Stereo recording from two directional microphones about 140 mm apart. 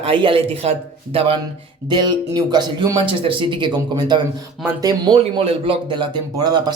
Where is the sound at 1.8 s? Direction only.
30° right (ahead or behind).